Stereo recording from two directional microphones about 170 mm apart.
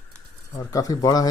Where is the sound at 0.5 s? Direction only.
20° left (ahead or behind).